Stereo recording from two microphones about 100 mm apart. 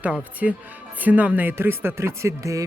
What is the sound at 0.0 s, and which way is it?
Speech, 15° right (ahead or behind).